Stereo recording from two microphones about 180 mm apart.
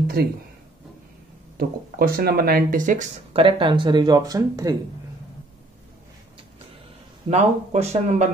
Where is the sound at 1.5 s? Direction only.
55° right (ahead or behind).